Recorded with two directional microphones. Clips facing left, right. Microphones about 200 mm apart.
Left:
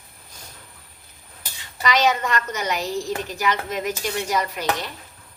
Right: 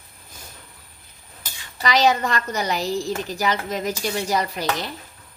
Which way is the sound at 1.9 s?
35° right (ahead or behind).